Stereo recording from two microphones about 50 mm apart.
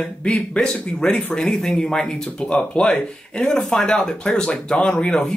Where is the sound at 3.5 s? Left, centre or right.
Centre.